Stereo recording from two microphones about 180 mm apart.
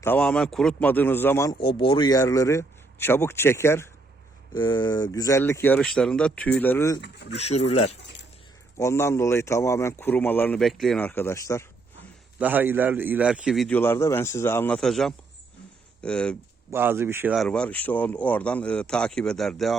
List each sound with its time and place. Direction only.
0.0 s speech: 10° left (ahead or behind)
1.6 s speech: 30° left (ahead or behind)
4.5 s speech: 25° left (ahead or behind)
7.0 s speech: 70° left (ahead or behind)
7.3 s speech: 35° left (ahead or behind)
8.8 s speech: 15° left (ahead or behind)
12.4 s a man's voice: 10° right (ahead or behind)
16.7 s speech: 15° right (ahead or behind)
17.3 s a man's voice: 5° left (ahead or behind)